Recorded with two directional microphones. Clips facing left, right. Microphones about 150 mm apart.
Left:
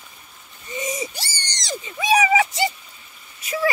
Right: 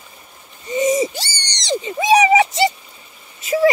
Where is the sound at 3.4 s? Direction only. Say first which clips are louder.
Right 8 dB; 25° right (ahead or behind).